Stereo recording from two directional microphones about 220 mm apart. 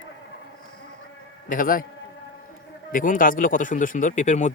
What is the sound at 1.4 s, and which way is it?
Speech, 40° left (ahead or behind).